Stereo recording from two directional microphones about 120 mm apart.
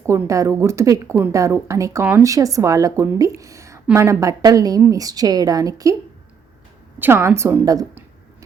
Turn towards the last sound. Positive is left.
turn(degrees=-30)  # may be behind; listen again after turning